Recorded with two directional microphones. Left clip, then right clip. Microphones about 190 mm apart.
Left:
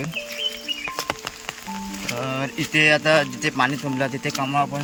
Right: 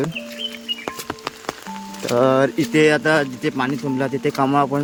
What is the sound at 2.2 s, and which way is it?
Speech, 30° right (ahead or behind).